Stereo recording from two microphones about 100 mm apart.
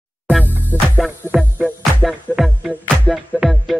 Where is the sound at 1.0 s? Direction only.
5° right (ahead or behind).